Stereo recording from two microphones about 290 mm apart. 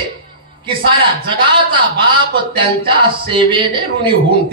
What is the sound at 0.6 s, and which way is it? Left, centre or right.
A man's voice, centre.